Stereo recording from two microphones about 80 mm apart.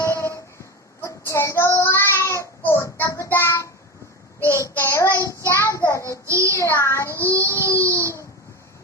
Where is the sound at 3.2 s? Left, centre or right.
Left.